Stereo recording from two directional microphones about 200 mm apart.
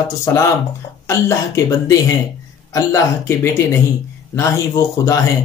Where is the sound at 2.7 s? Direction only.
15° left (ahead or behind).